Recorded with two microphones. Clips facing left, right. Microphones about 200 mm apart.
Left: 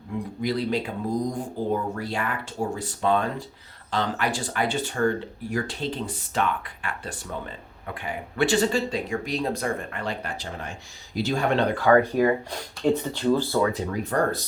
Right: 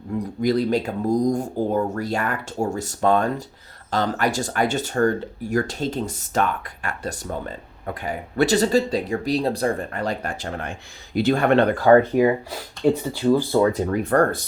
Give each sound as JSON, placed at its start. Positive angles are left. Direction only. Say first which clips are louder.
{"t": 0.2, "sound": "speech", "louder": "right 6 dB", "side_deg": -45}
{"t": 11.1, "sound": "speech", "louder": "right 6 dB", "side_deg": -60}
{"t": 11.8, "sound": "speech", "louder": "right 3 dB", "side_deg": -30}
{"t": 12.1, "sound": "speech", "louder": "right 3 dB", "side_deg": -10}
{"t": 13.7, "sound": "speech", "louder": "right 6 dB", "side_deg": -50}